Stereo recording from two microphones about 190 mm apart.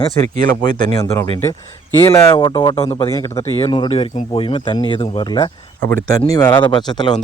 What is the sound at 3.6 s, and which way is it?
Speech, 25° left (ahead or behind).